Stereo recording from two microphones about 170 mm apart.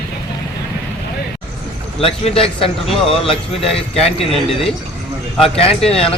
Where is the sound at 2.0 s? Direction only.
35° left (ahead or behind).